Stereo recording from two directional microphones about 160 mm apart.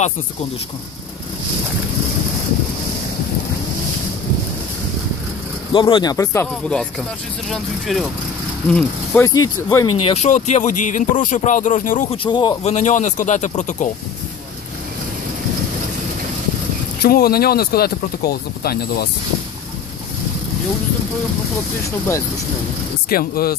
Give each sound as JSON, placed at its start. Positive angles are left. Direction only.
{"t": 5.7, "sound": "speech", "side_deg": 30}
{"t": 6.1, "sound": "speech", "side_deg": 20}
{"t": 7.4, "sound": "speech", "side_deg": 0}
{"t": 9.3, "sound": "speech", "side_deg": 20}
{"t": 10.0, "sound": "speech", "side_deg": 45}
{"t": 12.1, "sound": "speech", "side_deg": 30}
{"t": 12.6, "sound": "speech", "side_deg": 45}
{"t": 17.0, "sound": "speech", "side_deg": 70}
{"t": 23.0, "sound": "speech", "side_deg": 70}